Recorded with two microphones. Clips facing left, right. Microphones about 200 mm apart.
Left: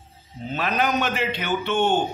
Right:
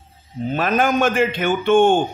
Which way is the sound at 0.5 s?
50° right (ahead or behind).